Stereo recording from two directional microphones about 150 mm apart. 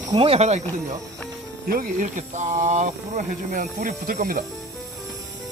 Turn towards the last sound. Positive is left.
turn(degrees=-60)  # may be behind; listen again after turning